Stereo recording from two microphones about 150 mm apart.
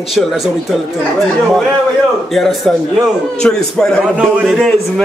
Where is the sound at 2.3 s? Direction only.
Centre (ahead or behind).